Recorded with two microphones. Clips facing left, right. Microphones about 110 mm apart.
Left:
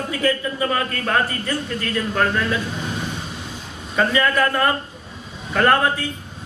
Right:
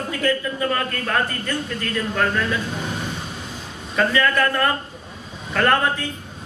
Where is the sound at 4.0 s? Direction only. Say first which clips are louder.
Left 1 dB; 15° left (ahead or behind).